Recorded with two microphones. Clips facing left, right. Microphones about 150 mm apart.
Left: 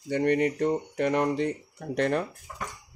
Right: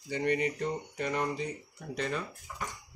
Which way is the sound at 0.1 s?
55° left (ahead or behind).